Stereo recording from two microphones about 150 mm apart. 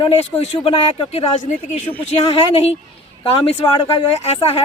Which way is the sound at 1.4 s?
50° left (ahead or behind).